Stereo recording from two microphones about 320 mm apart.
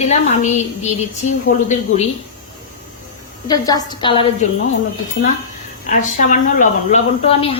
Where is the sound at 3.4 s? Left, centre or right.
Centre.